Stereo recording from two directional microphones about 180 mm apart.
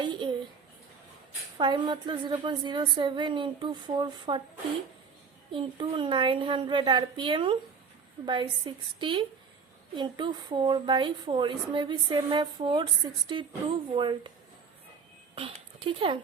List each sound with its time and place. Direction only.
0.0 s a sound: 25° right (ahead or behind)
1.5 s a woman's voice: 25° right (ahead or behind)
5.5 s a woman's voice: 30° right (ahead or behind)
15.4 s a woman's voice: 30° right (ahead or behind)